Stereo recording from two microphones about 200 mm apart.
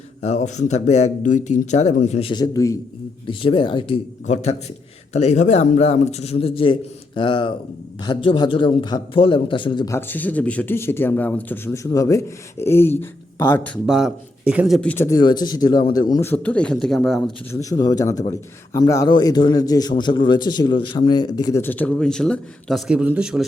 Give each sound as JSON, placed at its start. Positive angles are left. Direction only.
{"t": 0.2, "sound": "a man's voice", "side_deg": 35}
{"t": 13.8, "sound": "speech", "side_deg": -5}
{"t": 14.8, "sound": "a man's voice", "side_deg": 10}
{"t": 17.5, "sound": "speech", "side_deg": 15}